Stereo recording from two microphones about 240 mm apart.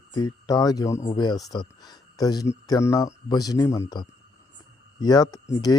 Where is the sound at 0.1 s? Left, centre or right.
Centre.